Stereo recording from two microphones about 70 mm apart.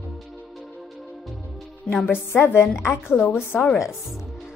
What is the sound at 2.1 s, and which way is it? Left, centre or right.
A woman's voice, left.